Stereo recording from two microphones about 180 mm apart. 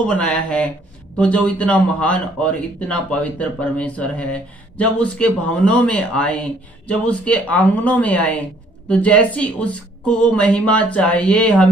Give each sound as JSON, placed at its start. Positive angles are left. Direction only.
{"t": 0.0, "sound": "a man's voice", "side_deg": 5}